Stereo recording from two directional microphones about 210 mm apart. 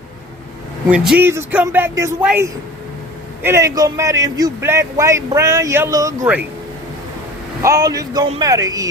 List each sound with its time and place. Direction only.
0.9 s a man's voice: 5° right (ahead or behind)
7.6 s a man's voice: 15° right (ahead or behind)